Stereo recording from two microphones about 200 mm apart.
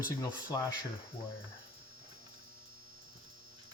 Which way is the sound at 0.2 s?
15° left (ahead or behind).